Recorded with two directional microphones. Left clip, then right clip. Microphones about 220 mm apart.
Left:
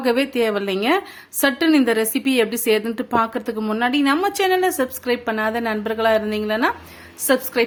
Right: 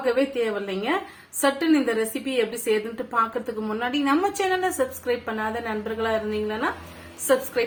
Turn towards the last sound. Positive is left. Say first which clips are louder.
# left 2 dB
turn(degrees=45)  # may be behind; listen again after turning